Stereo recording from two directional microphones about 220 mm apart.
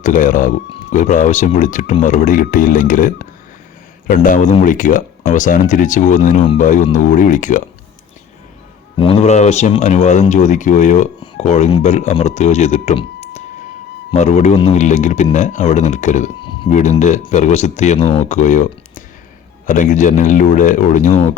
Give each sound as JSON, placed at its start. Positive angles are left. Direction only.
{"t": 0.0, "sound": "speech", "side_deg": 35}
{"t": 9.0, "sound": "speech", "side_deg": 25}